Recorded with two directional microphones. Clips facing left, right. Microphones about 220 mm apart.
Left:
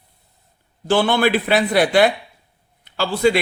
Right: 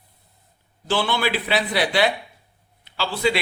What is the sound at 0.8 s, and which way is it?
A man's voice, 50° left (ahead or behind).